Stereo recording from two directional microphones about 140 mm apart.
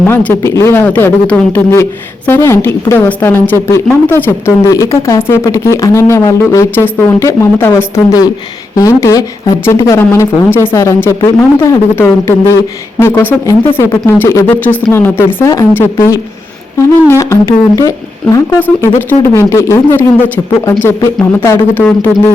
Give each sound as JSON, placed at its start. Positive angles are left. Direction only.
{"t": 0.1, "sound": "speech", "side_deg": 15}